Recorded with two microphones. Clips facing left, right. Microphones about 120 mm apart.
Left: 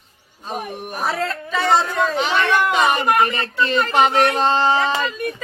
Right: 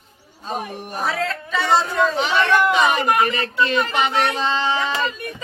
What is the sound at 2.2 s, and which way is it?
Speech, 50° left (ahead or behind).